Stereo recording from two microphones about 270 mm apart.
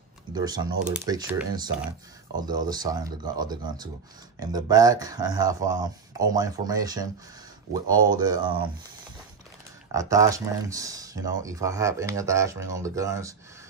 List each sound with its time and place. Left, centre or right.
0.3 s speech: centre
8.2 s speech: centre
9.9 s speech: centre